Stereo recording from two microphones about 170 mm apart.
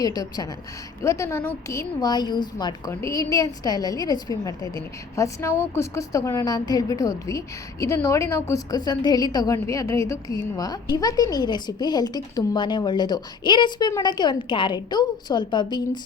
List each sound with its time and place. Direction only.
0.0 s a woman's voice: 20° left (ahead or behind)